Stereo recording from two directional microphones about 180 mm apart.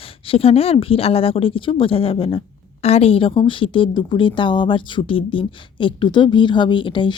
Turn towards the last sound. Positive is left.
turn(degrees=25)  # may be behind; listen again after turning